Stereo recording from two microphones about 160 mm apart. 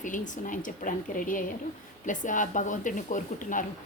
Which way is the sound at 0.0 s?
55° left (ahead or behind).